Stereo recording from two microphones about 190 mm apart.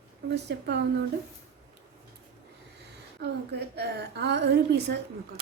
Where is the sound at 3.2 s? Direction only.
60° right (ahead or behind).